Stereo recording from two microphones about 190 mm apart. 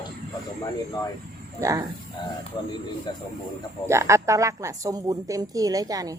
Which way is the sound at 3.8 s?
15° right (ahead or behind).